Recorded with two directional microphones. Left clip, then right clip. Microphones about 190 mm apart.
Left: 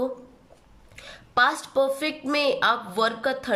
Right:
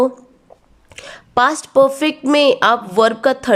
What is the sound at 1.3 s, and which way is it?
Speech, 35° right (ahead or behind).